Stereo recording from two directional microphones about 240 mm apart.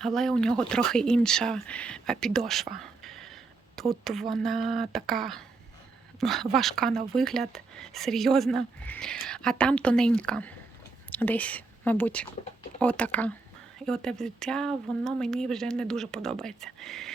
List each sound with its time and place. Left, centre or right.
0.0 s speech: centre
2.7 s whispering: centre
3.8 s speech: centre